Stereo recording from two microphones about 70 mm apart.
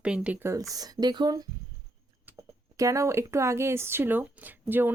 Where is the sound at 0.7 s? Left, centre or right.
Right.